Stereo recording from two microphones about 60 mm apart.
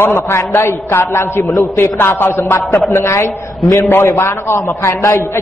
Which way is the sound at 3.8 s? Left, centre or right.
Left.